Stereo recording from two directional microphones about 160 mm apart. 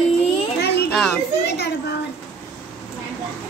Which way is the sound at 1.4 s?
90° left.